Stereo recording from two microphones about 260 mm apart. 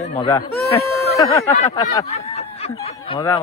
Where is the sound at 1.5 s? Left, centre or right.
Left.